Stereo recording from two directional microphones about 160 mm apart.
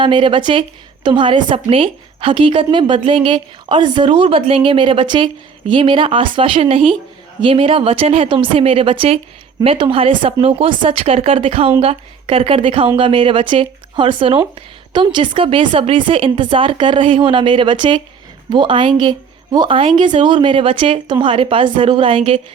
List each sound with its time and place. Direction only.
0.0 s a woman's voice: 30° right (ahead or behind)